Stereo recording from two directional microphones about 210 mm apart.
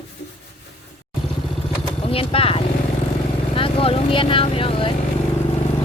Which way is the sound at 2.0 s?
25° left (ahead or behind).